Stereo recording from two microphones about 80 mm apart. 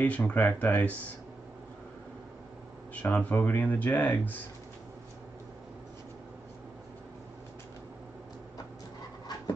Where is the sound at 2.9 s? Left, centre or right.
Centre.